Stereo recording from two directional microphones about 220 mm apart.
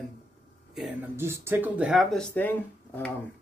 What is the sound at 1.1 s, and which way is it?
Speech, 10° right (ahead or behind).